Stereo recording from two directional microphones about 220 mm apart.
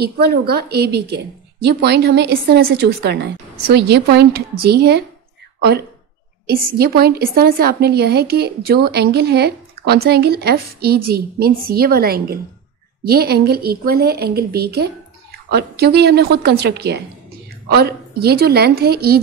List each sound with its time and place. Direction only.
0.0 s a woman's voice: 45° right (ahead or behind)
6.4 s a woman's voice: 45° right (ahead or behind)